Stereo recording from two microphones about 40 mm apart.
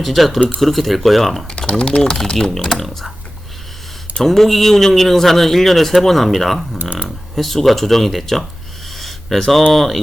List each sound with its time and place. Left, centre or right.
0.0 s a man's voice: centre
1.5 s typing: left
2.1 s speech: centre
2.5 s a man's voice: centre
4.2 s a man's voice: centre
9.0 s a sound: centre
9.7 s a man's voice: centre